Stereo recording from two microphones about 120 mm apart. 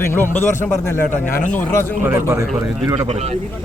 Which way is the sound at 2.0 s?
20° right (ahead or behind).